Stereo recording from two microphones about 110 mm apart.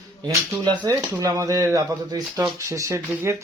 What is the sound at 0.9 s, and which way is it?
Speech, 30° right (ahead or behind).